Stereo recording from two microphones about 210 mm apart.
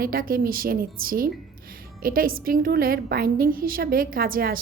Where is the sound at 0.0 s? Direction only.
45° right (ahead or behind).